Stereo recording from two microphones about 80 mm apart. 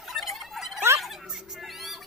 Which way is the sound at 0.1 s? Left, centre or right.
Centre.